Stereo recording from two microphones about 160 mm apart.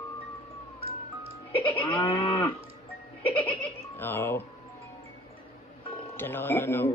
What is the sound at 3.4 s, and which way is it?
Giggle, 10° left (ahead or behind).